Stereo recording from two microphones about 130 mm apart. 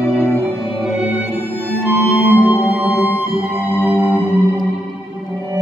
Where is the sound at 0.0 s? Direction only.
5° left (ahead or behind).